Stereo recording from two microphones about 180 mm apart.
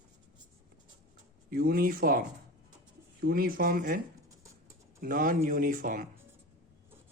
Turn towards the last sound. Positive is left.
turn(degrees=-50)  # may be behind; listen again after turning